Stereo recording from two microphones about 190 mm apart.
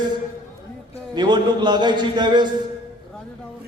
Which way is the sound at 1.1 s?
25° right (ahead or behind).